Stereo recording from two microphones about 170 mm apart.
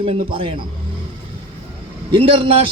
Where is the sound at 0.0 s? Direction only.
30° right (ahead or behind).